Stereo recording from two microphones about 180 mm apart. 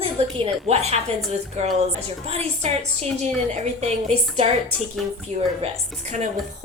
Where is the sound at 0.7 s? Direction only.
35° right (ahead or behind).